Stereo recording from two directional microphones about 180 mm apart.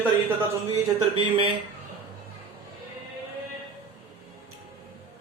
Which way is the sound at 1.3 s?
30° right (ahead or behind).